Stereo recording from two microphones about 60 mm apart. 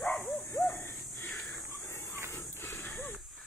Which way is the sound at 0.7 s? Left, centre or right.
Left.